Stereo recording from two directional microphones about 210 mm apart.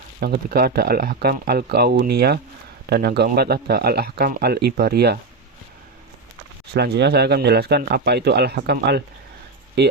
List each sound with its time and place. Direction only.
0.2 s speech: 45° right (ahead or behind)
6.7 s speech: 55° right (ahead or behind)